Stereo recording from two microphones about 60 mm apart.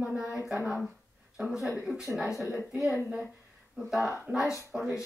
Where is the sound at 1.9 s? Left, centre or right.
Centre.